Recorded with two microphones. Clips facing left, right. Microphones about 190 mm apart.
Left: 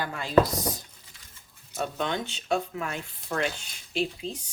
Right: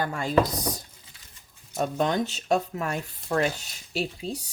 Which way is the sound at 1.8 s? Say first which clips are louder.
Right 5 dB; 40° right (ahead or behind).